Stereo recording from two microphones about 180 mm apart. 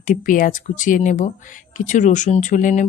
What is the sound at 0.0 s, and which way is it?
A woman's voice, 45° left (ahead or behind).